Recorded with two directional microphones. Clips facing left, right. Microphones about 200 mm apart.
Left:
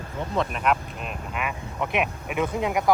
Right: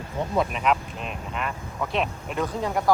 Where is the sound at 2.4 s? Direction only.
20° left (ahead or behind).